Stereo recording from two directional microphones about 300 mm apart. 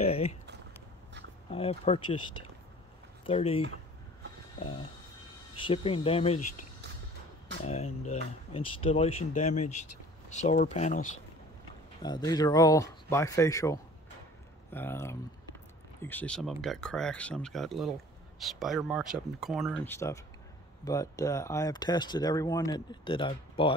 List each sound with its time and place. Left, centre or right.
0.0 s a sound: left
1.5 s speech: centre
3.3 s speech: centre
5.6 s speech: centre
7.6 s speech: left
12.0 s speech: centre